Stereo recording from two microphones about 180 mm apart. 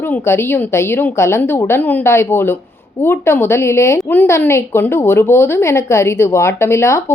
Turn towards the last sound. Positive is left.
turn(degrees=15)  # may be behind; listen again after turning